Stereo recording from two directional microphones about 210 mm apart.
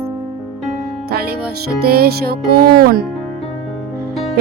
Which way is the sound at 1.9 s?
50° right (ahead or behind).